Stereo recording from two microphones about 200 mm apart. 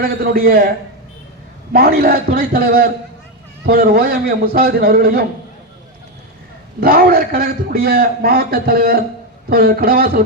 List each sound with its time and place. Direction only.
0.0 s a man's voice: 50° right (ahead or behind)
1.7 s a man's voice: 50° right (ahead or behind)
6.7 s a man's voice: 50° right (ahead or behind)